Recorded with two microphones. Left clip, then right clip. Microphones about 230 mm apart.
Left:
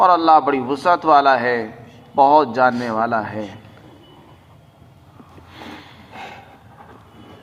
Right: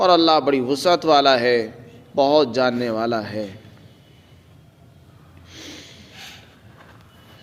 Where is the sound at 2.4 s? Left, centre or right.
Right.